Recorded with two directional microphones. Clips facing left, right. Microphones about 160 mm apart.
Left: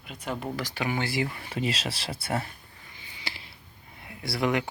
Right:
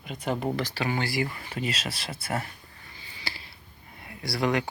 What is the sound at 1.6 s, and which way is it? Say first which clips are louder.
Speech: left 2 dB; 30° left (ahead or behind).